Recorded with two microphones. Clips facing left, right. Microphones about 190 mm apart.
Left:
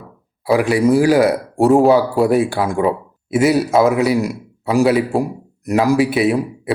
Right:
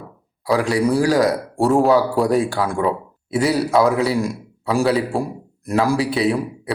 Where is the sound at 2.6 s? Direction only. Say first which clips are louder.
Left 3 dB; 20° left (ahead or behind).